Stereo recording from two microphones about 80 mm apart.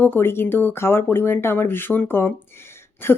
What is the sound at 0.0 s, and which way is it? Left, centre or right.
Speech, left.